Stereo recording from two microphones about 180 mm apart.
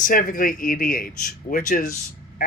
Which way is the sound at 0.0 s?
50° left (ahead or behind).